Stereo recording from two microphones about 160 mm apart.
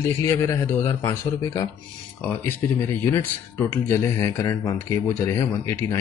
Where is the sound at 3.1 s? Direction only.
15° left (ahead or behind).